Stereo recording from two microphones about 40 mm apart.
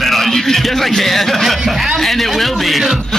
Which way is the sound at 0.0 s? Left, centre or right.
Centre.